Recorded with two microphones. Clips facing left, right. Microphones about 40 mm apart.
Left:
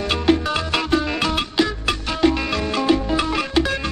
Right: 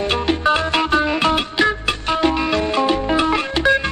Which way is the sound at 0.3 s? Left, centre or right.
Right.